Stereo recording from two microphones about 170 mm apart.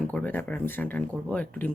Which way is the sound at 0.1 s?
10° left (ahead or behind).